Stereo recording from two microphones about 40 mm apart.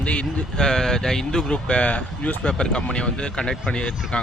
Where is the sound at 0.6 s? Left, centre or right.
Centre.